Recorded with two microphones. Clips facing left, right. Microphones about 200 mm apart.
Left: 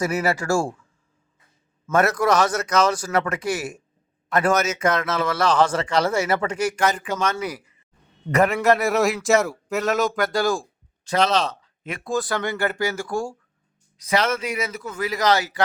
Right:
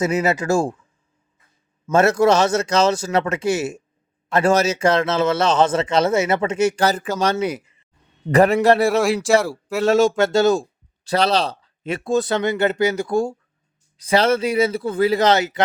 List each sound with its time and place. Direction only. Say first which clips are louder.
0.0 s speech: right 3 dB; 20° right (ahead or behind)
1.9 s speech: right 4 dB; 25° right (ahead or behind)